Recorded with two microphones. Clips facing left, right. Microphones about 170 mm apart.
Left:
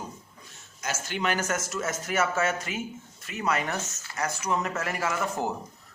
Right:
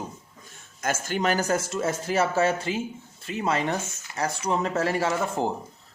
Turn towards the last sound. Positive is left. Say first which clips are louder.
# right 3 dB
turn(degrees=-30)  # may be behind; listen again after turning